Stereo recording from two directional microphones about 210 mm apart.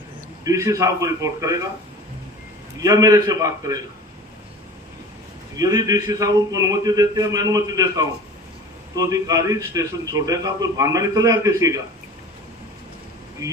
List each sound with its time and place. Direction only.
0.4 s a man's voice: 15° right (ahead or behind)
2.8 s a man's voice: 15° right (ahead or behind)
5.5 s a man's voice: 15° right (ahead or behind)